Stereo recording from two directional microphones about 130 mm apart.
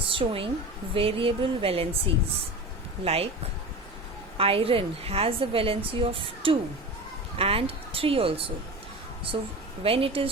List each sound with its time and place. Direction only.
0.1 s a woman's voice: 40° right (ahead or behind)
3.0 s a woman's voice: 50° right (ahead or behind)
4.4 s a woman's voice: 45° right (ahead or behind)
9.8 s a woman's voice: 45° right (ahead or behind)